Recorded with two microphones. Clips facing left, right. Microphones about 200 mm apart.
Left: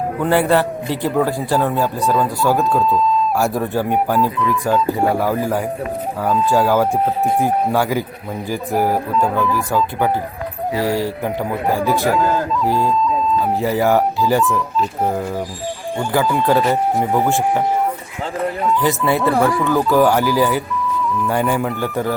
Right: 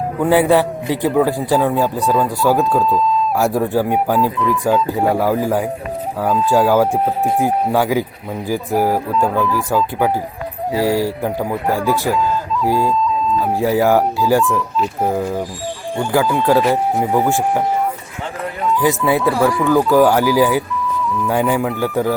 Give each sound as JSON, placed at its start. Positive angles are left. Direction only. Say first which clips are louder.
{"t": 0.2, "sound": "speech", "louder": "right 3 dB", "side_deg": -10}
{"t": 2.6, "sound": "speech", "louder": "right 1 dB", "side_deg": 0}
{"t": 3.3, "sound": "speech", "louder": "right 2 dB", "side_deg": -15}
{"t": 10.8, "sound": "speech", "louder": "right 3 dB", "side_deg": -10}
{"t": 11.7, "sound": "speech", "louder": "even", "side_deg": 15}
{"t": 12.6, "sound": "speech", "louder": "right 3 dB", "side_deg": -15}
{"t": 13.4, "sound": "speech", "louder": "right 4 dB", "side_deg": 0}
{"t": 18.8, "sound": "speech", "louder": "right 4 dB", "side_deg": -15}